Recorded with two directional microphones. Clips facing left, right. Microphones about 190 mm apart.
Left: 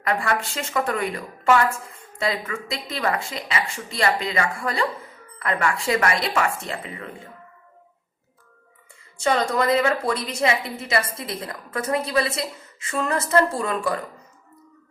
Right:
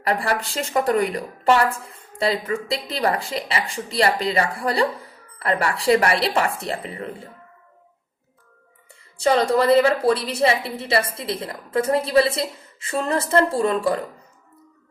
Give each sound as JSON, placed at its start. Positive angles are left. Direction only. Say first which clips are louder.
{"t": 0.0, "sound": "a woman's voice", "louder": "right 1 dB", "side_deg": -35}
{"t": 9.1, "sound": "a woman's voice", "louder": "right 4 dB", "side_deg": -35}